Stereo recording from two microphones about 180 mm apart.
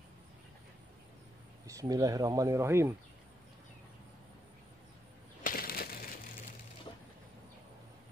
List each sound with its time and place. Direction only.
1.7 s speech: 20° right (ahead or behind)
5.4 s crushing: 55° left (ahead or behind)